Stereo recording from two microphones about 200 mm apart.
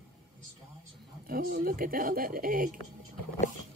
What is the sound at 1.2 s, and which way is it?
Speech, 50° right (ahead or behind).